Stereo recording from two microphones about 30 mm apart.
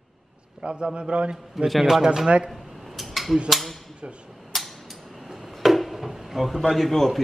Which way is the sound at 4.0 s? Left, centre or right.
Right.